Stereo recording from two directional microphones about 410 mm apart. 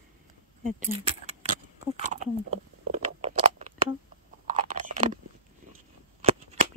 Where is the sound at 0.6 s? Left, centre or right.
Centre.